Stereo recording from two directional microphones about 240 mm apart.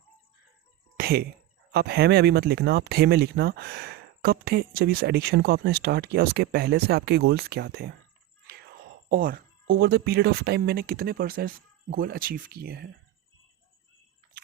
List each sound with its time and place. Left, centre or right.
0.9 s a sound: right
1.7 s speech: right
9.0 s speech: right